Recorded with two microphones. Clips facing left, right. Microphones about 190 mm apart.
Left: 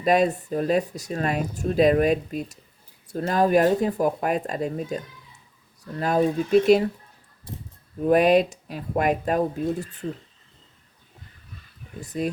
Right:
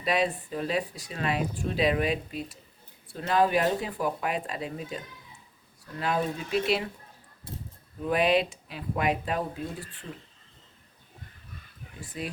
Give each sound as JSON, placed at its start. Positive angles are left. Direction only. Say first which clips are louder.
{"t": 0.0, "sound": "speech", "louder": "left 7 dB", "side_deg": 45}
{"t": 8.0, "sound": "speech", "louder": "left 7 dB", "side_deg": 45}
{"t": 11.9, "sound": "speech", "louder": "left 9 dB", "side_deg": 40}